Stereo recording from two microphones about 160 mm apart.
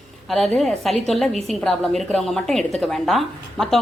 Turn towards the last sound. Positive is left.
turn(degrees=0)  # may be behind; listen again after turning